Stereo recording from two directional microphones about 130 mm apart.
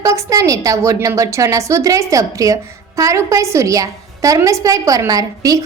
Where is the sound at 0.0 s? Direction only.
25° right (ahead or behind).